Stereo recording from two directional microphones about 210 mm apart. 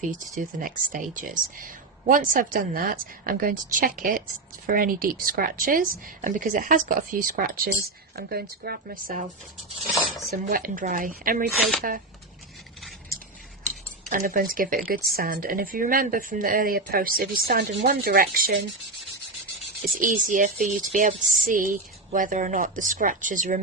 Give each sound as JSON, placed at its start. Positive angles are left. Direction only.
{"t": 0.0, "sound": "speech", "side_deg": -35}
{"t": 10.3, "sound": "speech", "side_deg": -40}
{"t": 14.1, "sound": "speech", "side_deg": -40}
{"t": 20.0, "sound": "speech", "side_deg": -40}